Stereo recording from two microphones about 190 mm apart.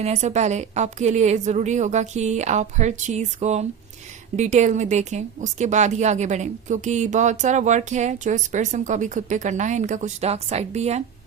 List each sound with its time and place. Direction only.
0.0 s speech: 35° right (ahead or behind)